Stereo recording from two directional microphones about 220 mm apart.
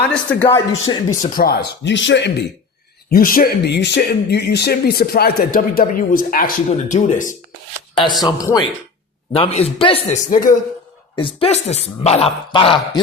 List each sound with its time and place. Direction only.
0.1 s speech: 5° left (ahead or behind)
1.2 s speech: 40° left (ahead or behind)
3.1 s speech: 40° left (ahead or behind)
8.2 s speech: 15° left (ahead or behind)
9.3 s speech: 25° left (ahead or behind)
11.2 s speech: 25° left (ahead or behind)